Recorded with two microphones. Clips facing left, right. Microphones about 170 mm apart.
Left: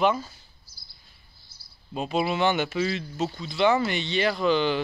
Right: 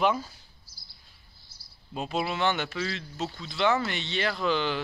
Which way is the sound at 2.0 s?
5° left (ahead or behind).